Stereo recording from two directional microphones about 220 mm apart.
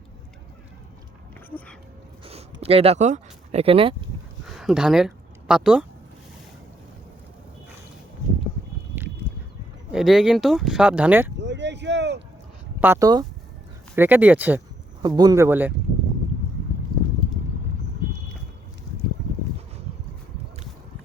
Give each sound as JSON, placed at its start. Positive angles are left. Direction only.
{"t": 1.5, "sound": "speech", "side_deg": 5}
{"t": 2.2, "sound": "a sound", "side_deg": -25}
{"t": 4.5, "sound": "speech", "side_deg": 0}
{"t": 9.3, "sound": "a sound", "side_deg": 5}
{"t": 9.9, "sound": "speech", "side_deg": 0}
{"t": 11.3, "sound": "boat", "side_deg": -55}
{"t": 12.8, "sound": "speech", "side_deg": -15}
{"t": 19.2, "sound": "boat", "side_deg": -55}